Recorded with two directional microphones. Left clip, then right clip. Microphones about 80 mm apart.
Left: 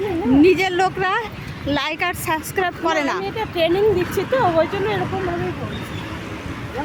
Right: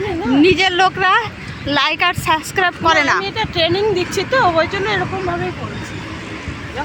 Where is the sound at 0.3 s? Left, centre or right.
Centre.